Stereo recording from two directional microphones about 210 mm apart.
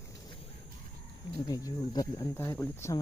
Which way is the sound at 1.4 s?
15° left (ahead or behind).